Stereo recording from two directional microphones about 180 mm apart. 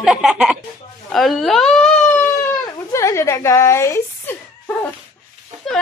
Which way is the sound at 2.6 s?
15° left (ahead or behind).